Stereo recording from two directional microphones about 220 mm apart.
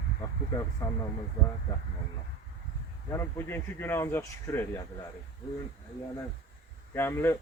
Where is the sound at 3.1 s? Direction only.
10° left (ahead or behind).